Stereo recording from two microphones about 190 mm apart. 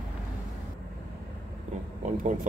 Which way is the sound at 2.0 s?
40° right (ahead or behind).